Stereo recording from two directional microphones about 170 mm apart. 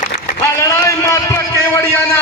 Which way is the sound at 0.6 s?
15° left (ahead or behind).